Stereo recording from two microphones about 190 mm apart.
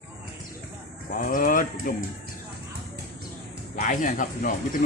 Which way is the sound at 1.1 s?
45° left (ahead or behind).